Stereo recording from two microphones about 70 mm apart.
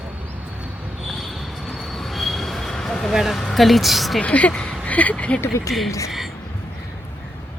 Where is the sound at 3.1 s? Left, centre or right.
Centre.